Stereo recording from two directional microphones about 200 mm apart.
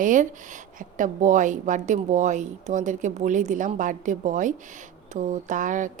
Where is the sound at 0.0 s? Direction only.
40° right (ahead or behind).